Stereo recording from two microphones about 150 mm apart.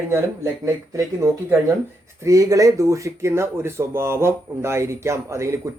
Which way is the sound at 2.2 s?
20° right (ahead or behind).